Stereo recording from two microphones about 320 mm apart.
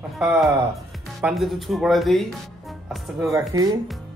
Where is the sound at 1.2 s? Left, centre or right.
Centre.